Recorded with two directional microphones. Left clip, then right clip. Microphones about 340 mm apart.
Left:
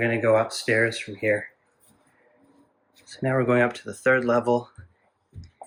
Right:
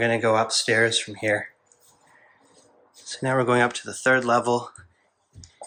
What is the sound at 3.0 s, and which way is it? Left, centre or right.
Speech, centre.